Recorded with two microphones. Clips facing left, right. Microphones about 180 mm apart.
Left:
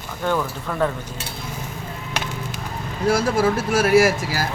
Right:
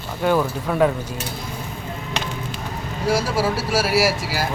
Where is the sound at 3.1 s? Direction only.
50° left (ahead or behind).